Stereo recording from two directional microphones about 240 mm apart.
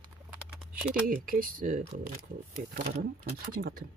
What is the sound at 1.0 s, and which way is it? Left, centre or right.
Speech, right.